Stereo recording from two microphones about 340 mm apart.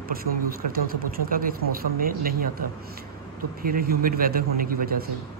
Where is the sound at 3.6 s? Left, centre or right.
Right.